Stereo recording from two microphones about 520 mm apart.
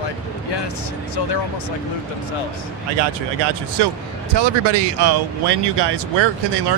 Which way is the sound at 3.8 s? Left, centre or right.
Right.